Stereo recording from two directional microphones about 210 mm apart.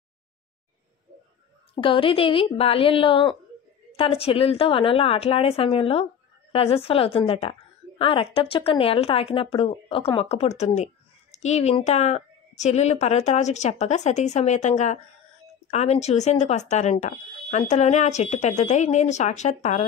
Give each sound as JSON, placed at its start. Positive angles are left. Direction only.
{"t": 1.8, "sound": "a woman's voice", "side_deg": 25}